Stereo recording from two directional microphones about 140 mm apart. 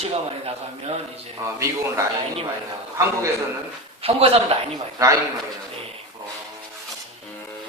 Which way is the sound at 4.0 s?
45° right (ahead or behind).